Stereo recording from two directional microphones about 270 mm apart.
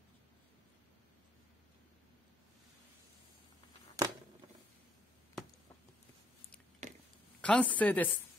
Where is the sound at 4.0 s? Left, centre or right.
Centre.